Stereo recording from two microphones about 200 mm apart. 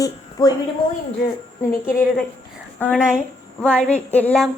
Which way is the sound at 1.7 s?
10° left (ahead or behind).